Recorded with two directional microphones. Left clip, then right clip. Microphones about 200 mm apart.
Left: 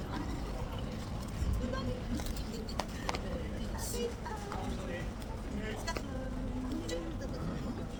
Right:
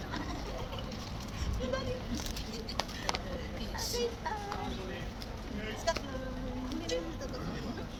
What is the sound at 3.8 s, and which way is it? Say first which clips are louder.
Vehicle: right 5 dB; 25° left (ahead or behind).